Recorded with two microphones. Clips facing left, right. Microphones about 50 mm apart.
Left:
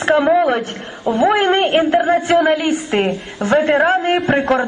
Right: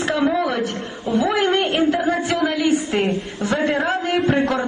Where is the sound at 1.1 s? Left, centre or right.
Left.